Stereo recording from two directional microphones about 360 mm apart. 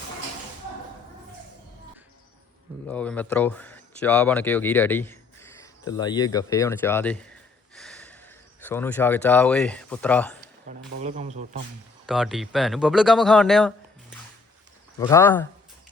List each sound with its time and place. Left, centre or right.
2.8 s speech: centre
7.8 s snort: centre
8.6 s speech: centre
10.7 s speech: centre
12.0 s speech: centre
14.9 s speech: centre